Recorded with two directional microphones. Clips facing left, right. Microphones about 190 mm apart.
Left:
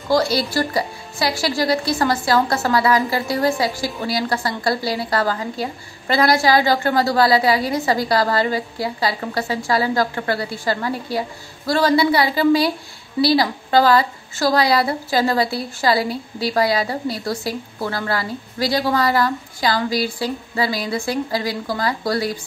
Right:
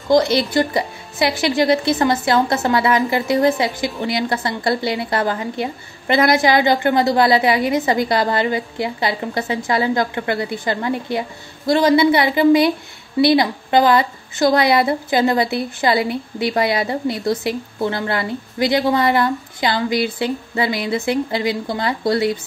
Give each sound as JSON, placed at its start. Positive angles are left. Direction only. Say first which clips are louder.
{"t": 0.1, "sound": "speech", "louder": "right 3 dB", "side_deg": -20}